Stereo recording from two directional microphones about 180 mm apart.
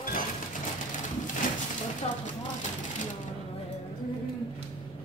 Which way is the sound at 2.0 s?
35° left (ahead or behind).